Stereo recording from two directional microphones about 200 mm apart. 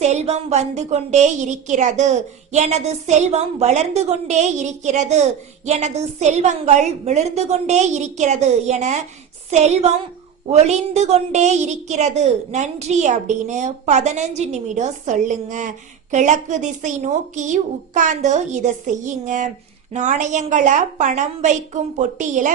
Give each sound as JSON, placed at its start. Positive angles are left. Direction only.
{"t": 0.0, "sound": "a woman's voice", "side_deg": -35}